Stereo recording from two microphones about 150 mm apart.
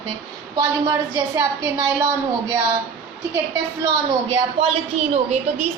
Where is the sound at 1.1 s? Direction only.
25° right (ahead or behind).